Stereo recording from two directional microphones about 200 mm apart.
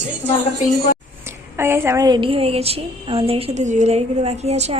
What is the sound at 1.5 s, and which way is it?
A woman's voice, 10° right (ahead or behind).